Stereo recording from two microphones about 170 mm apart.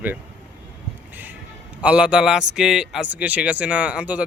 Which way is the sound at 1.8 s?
5° right (ahead or behind).